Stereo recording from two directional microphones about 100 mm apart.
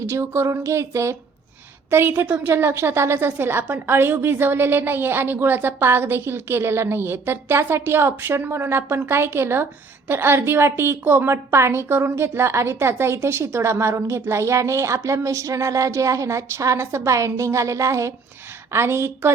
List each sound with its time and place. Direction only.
0.0 s a woman's voice: 25° right (ahead or behind)